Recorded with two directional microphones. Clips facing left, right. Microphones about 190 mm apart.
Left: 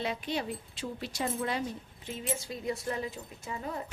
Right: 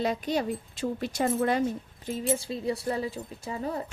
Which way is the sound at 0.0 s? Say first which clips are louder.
Right 6 dB; 40° right (ahead or behind).